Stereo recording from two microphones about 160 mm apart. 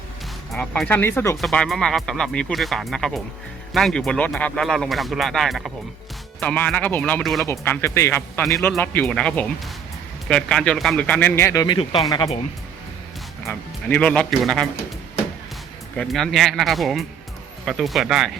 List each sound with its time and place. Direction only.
0.5 s speech: 5° left (ahead or behind)
1.4 s speech: centre (ahead or behind)
7.2 s speech: centre (ahead or behind)
7.4 s speech: 15° left (ahead or behind)
13.4 s speech: 10° left (ahead or behind)
16.0 s speech: centre (ahead or behind)